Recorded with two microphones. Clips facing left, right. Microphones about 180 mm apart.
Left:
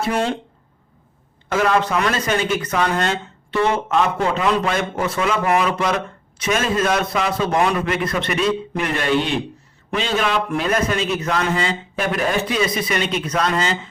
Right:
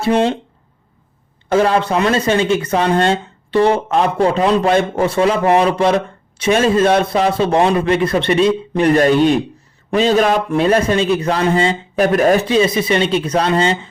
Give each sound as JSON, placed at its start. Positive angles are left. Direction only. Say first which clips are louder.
{"t": 0.0, "sound": "speech", "louder": "right 6 dB", "side_deg": -25}
{"t": 1.5, "sound": "speech", "louder": "right 4 dB", "side_deg": -30}
{"t": 12.5, "sound": "speech", "louder": "right 7 dB", "side_deg": -30}